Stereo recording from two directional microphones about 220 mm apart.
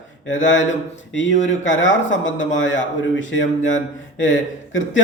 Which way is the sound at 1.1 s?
55° left (ahead or behind).